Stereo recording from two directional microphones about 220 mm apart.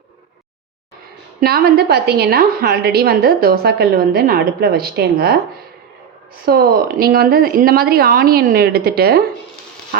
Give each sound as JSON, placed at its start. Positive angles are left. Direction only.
{"t": 1.4, "sound": "a woman's voice", "side_deg": -45}
{"t": 6.4, "sound": "a woman's voice", "side_deg": -40}